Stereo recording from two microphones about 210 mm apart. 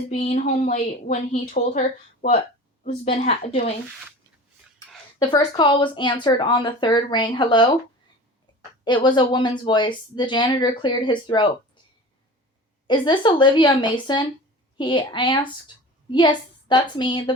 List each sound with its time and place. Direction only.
0.1 s a woman's voice: 35° left (ahead or behind)
5.2 s speech: 20° left (ahead or behind)
8.8 s speech: 20° left (ahead or behind)
12.9 s a woman's voice: 20° left (ahead or behind)